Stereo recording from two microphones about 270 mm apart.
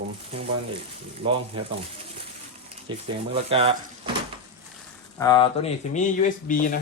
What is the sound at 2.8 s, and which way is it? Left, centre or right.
Speech, right.